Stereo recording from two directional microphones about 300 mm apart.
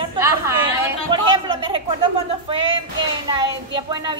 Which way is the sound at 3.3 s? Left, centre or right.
Centre.